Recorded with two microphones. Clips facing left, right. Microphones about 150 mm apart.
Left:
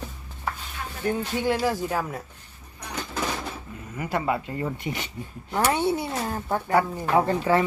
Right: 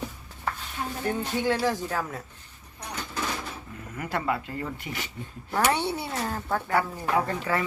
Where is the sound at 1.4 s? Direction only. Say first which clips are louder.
Even; 10° left (ahead or behind).